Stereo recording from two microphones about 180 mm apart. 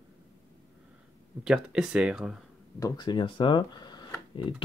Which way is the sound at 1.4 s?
5° right (ahead or behind).